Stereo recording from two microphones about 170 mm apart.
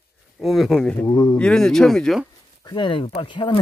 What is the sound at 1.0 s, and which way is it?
Speech, 20° left (ahead or behind).